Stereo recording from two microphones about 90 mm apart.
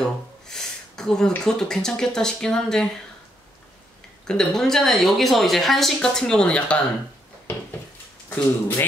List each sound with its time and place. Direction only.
0.0 s gasp: 5° left (ahead or behind)
1.4 s speech: 5° left (ahead or behind)
4.3 s a woman's voice: 5° left (ahead or behind)
8.3 s speech: 25° left (ahead or behind)